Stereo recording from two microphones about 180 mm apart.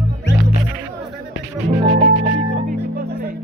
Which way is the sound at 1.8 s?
35° right (ahead or behind).